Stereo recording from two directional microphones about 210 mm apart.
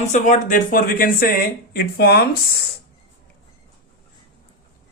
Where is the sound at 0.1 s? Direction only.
35° left (ahead or behind).